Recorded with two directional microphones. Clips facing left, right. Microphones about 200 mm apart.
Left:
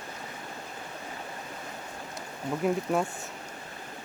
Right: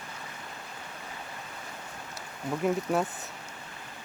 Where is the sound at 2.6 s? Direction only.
Centre (ahead or behind).